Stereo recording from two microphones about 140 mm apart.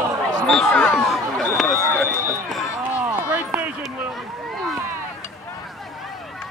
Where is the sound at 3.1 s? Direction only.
10° right (ahead or behind).